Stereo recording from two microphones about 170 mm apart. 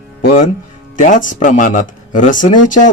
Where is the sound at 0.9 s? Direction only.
50° left (ahead or behind).